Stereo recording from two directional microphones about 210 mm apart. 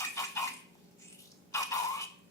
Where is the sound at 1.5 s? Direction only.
15° left (ahead or behind).